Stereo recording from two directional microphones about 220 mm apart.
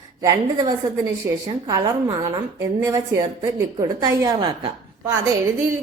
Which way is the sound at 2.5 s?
15° right (ahead or behind).